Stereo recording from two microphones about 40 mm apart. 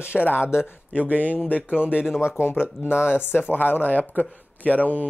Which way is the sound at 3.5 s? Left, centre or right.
Left.